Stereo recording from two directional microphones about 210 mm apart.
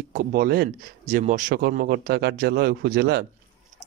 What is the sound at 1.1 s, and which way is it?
Speech, 35° right (ahead or behind).